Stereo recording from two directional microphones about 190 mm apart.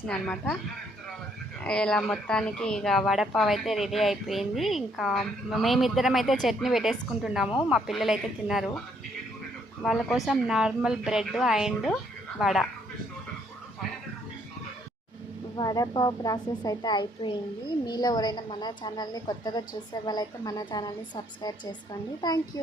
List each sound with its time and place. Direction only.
0.1 s speech: 5° left (ahead or behind)
1.6 s speech: 5° left (ahead or behind)
9.8 s speech: centre (ahead or behind)
15.5 s a woman's voice: 20° left (ahead or behind)